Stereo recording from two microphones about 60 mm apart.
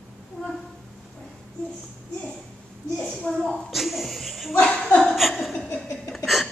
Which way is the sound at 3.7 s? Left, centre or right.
Centre.